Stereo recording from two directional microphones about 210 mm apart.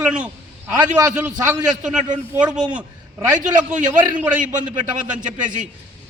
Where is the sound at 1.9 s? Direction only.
35° right (ahead or behind).